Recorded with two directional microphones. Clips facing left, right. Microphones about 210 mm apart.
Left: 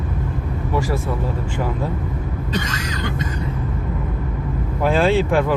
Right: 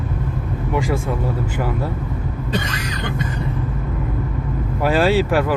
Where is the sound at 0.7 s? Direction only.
15° right (ahead or behind).